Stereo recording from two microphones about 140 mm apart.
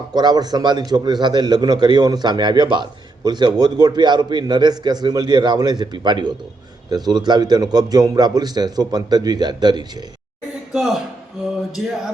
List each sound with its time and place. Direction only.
0.1 s a man's voice: 30° right (ahead or behind)
10.7 s a man's voice: centre (ahead or behind)